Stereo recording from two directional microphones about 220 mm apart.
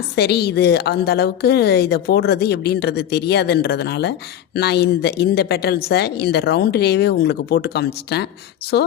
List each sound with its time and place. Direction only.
0.2 s a woman's voice: 50° left (ahead or behind)